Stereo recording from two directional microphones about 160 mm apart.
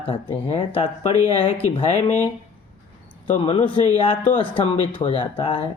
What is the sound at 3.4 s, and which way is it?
Speech, 35° left (ahead or behind).